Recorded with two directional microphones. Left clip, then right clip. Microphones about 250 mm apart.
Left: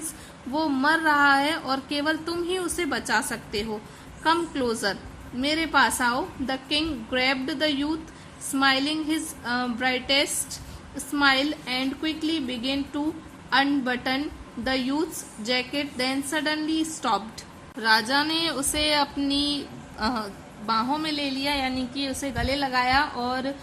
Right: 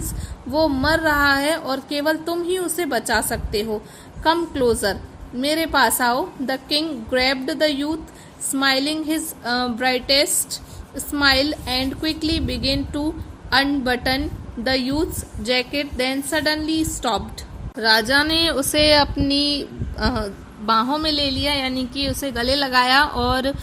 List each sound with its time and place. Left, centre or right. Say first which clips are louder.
0.5 s a woman's voice: right 5 dB; centre; by 23.6 s right